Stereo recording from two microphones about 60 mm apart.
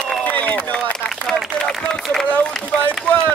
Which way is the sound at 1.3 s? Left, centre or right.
Centre.